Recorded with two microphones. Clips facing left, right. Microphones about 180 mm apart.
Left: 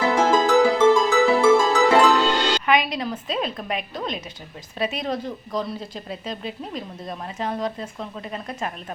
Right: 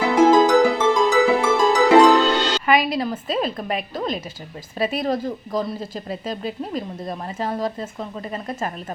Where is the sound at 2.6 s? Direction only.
5° right (ahead or behind).